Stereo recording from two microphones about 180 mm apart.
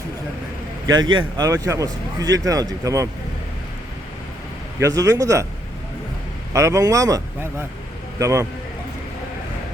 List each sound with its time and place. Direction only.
1.0 s speech: 90° right
1.4 s speech: 20° right (ahead or behind)
4.8 s a man's voice: 20° right (ahead or behind)
6.5 s a man's voice: 15° right (ahead or behind)
8.2 s a man's voice: 15° right (ahead or behind)